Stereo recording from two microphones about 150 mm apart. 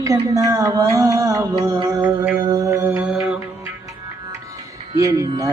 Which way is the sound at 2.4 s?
25° right (ahead or behind).